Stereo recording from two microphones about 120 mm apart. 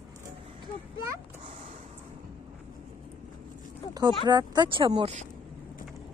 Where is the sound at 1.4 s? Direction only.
55° right (ahead or behind).